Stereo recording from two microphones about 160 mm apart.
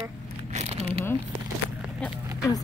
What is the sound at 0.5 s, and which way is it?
Crumpling, 40° right (ahead or behind).